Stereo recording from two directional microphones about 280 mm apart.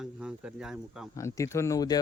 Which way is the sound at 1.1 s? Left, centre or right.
Centre.